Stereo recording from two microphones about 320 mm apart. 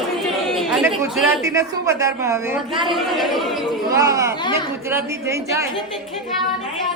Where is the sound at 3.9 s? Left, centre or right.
Centre.